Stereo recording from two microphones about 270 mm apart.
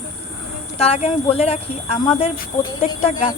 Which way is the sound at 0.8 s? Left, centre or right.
Left.